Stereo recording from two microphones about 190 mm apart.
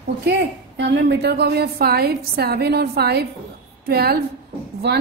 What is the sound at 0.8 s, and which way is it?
A woman's voice, 60° right (ahead or behind).